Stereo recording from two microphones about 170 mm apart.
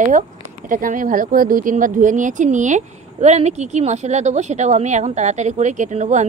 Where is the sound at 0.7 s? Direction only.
50° right (ahead or behind).